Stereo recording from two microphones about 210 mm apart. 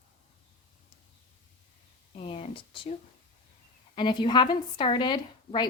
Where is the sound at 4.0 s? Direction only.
20° left (ahead or behind).